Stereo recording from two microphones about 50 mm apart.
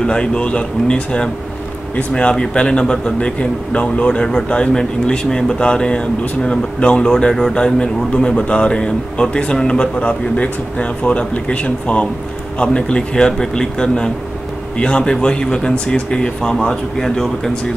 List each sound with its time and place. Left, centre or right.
0.0 s a man's voice: centre